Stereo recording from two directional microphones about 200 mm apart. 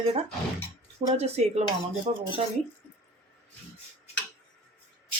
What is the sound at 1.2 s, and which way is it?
Speech, 30° right (ahead or behind).